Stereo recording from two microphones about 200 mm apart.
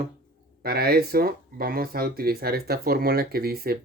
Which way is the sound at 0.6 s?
50° right (ahead or behind).